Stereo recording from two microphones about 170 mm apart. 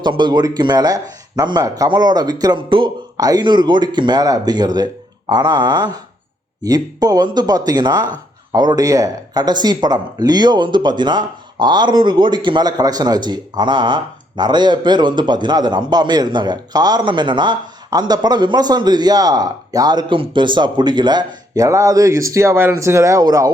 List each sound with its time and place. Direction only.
0.0 s speech: 25° right (ahead or behind)